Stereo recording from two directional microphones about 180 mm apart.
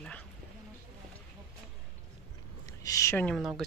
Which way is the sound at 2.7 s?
20° left (ahead or behind).